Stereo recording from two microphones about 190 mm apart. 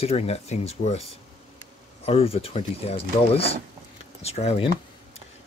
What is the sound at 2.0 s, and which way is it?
Speech, 30° left (ahead or behind).